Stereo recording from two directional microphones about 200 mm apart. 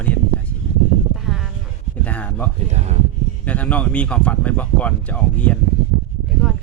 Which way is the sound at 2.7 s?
35° right (ahead or behind).